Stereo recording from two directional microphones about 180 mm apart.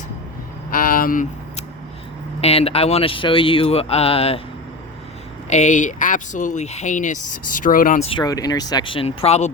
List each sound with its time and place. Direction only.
0.7 s a sound: 50° left (ahead or behind)
2.4 s speech: 35° left (ahead or behind)
5.5 s speech: 40° left (ahead or behind)
8.2 s speech: 20° left (ahead or behind); by 9.5 s 35° left (ahead or behind)